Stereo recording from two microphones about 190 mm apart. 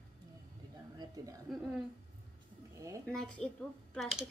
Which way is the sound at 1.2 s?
20° right (ahead or behind).